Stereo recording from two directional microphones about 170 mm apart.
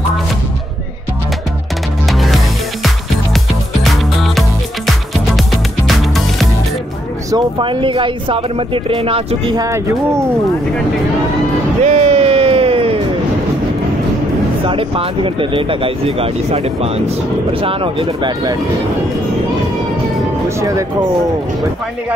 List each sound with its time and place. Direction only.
2.0 s music: centre (ahead or behind)
7.2 s speech: 25° right (ahead or behind)
9.6 s speech: 15° right (ahead or behind)
11.8 s a sound: 40° right (ahead or behind)
14.7 s speech: 30° right (ahead or behind)
20.4 s music: 20° right (ahead or behind)